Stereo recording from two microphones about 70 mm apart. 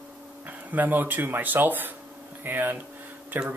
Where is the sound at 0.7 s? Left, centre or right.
Right.